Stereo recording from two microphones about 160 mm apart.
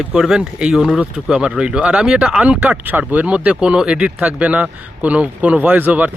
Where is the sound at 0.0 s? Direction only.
5° right (ahead or behind).